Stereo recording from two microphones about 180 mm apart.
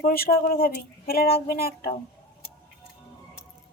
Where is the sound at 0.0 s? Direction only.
55° left (ahead or behind).